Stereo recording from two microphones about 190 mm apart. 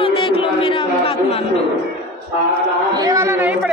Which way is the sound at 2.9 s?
20° right (ahead or behind).